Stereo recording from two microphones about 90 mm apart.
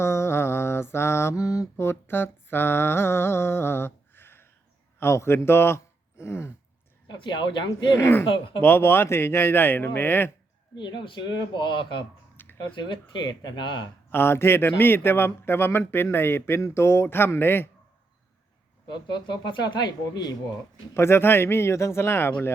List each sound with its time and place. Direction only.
0.0 s mantra: 30° left (ahead or behind)
1.7 s speech: 25° left (ahead or behind)
7.1 s speech: 60° left (ahead or behind)
7.9 s speech: 30° left (ahead or behind)
8.3 s speech: 65° left (ahead or behind)
8.6 s speech: 25° left (ahead or behind)
10.8 s speech: 60° left (ahead or behind)
12.4 s a sound: 20° left (ahead or behind)
12.8 s speech: 55° left (ahead or behind)
14.1 s speech: 25° left (ahead or behind)
18.9 s speech: 55° left (ahead or behind)
20.9 s speech: 30° left (ahead or behind)